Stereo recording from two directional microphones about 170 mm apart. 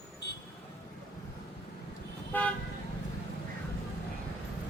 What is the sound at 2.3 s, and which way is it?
Toot, 10° left (ahead or behind).